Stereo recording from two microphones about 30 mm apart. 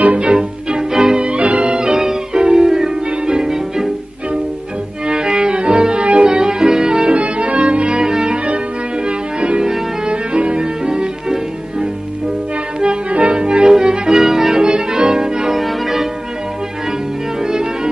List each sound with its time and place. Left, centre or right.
0.1 s music: right
1.8 s music: right
5.0 s music: right
6.2 s music: right
7.2 s music: right
10.6 s music: right
13.1 s music: right
14.2 s music: centre
14.6 s music: right
15.5 s change ringing: centre
17.4 s music: right